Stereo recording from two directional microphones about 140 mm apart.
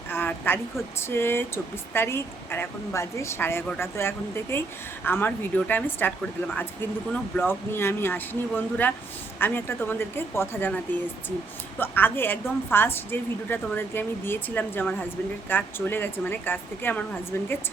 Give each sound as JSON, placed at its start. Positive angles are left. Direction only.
{"t": 0.1, "sound": "speech", "side_deg": 15}
{"t": 11.8, "sound": "speech", "side_deg": 15}